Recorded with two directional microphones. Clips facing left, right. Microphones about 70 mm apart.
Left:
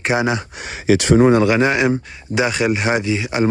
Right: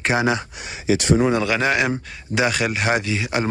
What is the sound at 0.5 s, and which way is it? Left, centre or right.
Speech, left.